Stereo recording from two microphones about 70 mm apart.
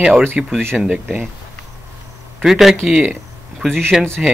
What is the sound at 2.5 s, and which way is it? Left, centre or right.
Speech, centre.